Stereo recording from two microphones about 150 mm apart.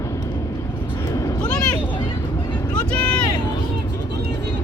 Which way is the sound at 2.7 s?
5° left (ahead or behind).